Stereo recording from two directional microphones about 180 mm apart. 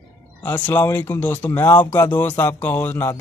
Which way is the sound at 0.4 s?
10° left (ahead or behind).